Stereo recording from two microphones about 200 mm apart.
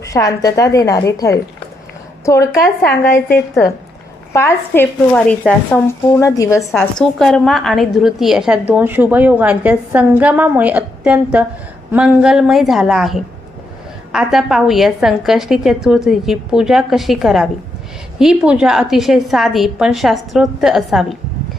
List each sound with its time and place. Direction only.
0.0 s a woman's voice: 15° left (ahead or behind)
6.7 s a woman's voice: centre (ahead or behind)